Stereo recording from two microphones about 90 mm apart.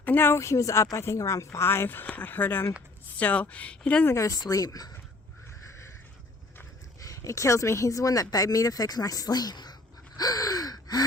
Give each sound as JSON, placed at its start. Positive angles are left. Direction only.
{"t": 0.0, "sound": "speech", "side_deg": 20}
{"t": 4.1, "sound": "speech", "side_deg": 40}
{"t": 7.0, "sound": "speech", "side_deg": 35}
{"t": 10.2, "sound": "gasp", "side_deg": 45}